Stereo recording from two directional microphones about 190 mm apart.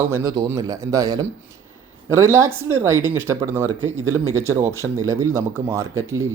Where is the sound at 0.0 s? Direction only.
15° right (ahead or behind).